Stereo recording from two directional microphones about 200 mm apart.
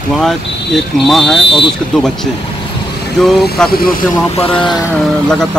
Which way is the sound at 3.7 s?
45° left (ahead or behind).